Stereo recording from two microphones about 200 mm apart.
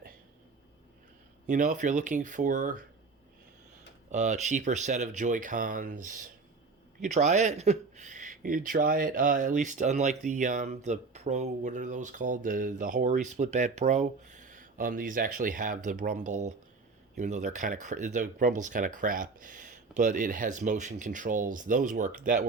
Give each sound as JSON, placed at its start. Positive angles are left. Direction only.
{"t": 1.5, "sound": "speech", "side_deg": -40}
{"t": 4.1, "sound": "speech", "side_deg": -35}